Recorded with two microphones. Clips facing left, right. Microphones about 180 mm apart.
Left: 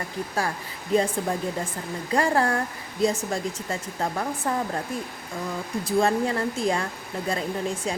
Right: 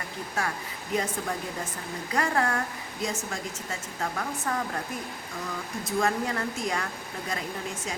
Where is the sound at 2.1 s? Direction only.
30° left (ahead or behind).